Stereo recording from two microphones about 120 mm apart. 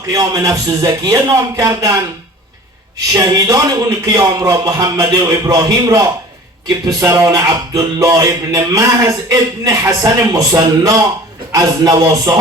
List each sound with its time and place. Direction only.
0.1 s speech: 30° right (ahead or behind)
3.1 s a man's voice: 30° right (ahead or behind)